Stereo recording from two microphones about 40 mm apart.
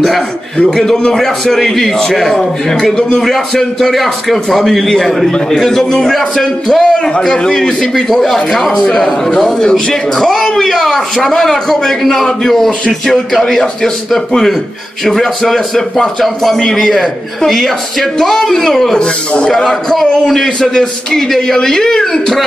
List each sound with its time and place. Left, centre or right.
0.7 s a man's voice: centre
6.8 s a man's voice: centre
18.9 s a man's voice: centre